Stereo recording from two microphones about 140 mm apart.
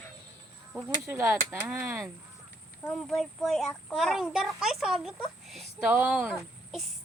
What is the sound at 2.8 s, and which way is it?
A child's voice, centre (ahead or behind).